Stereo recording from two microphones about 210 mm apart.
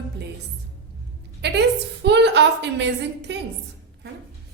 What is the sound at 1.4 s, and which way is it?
A woman's voice, 55° right (ahead or behind).